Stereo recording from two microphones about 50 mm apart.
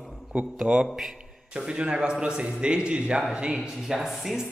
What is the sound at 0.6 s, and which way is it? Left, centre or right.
A man's voice, centre.